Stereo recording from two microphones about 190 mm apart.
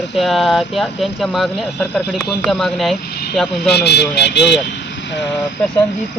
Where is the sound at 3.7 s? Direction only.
60° left (ahead or behind).